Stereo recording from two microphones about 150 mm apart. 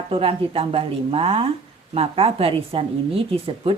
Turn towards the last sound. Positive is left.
turn(degrees=-40)  # may be behind; listen again after turning